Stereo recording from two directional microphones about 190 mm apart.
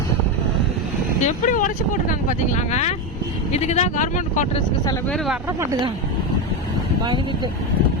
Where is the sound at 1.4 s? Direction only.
45° left (ahead or behind).